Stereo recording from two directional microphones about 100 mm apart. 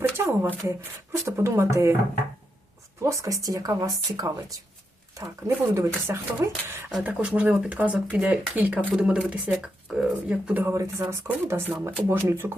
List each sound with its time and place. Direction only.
0.0 s speech: 25° right (ahead or behind)
3.0 s speech: 30° right (ahead or behind)
7.0 s speech: 15° right (ahead or behind)
10.6 s speech: 30° right (ahead or behind)